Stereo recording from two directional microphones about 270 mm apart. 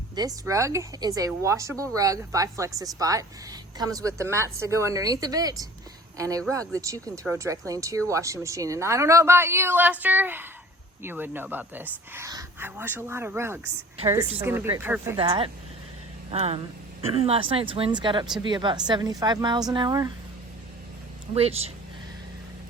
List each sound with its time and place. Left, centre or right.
0.2 s a woman's voice: centre
15.2 s a woman's voice: centre
21.3 s speech: right